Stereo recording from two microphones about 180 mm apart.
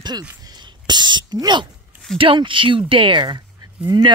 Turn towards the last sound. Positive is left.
turn(degrees=-20)  # may be behind; listen again after turning